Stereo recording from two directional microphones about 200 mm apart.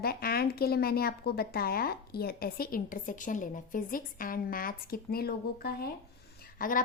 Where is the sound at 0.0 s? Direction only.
50° left (ahead or behind).